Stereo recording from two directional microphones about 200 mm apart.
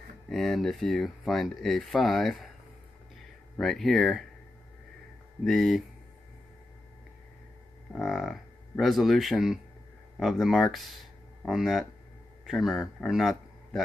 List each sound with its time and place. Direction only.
0.3 s speech: centre (ahead or behind)
3.5 s speech: centre (ahead or behind)
5.4 s speech: centre (ahead or behind)
7.9 s cattle: centre (ahead or behind)
10.1 s speech: centre (ahead or behind)